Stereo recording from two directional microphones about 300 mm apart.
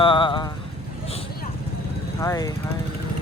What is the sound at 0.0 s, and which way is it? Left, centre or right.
Clip-clop, centre.